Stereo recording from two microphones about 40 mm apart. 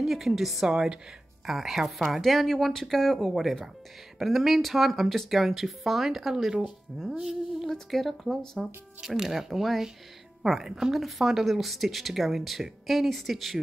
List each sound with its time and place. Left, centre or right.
0.0 s a woman's voice: centre
0.7 s a woman's voice: centre
7.9 s a woman's voice: centre